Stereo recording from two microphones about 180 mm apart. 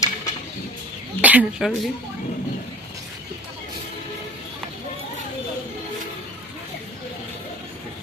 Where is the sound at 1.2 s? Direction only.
10° right (ahead or behind).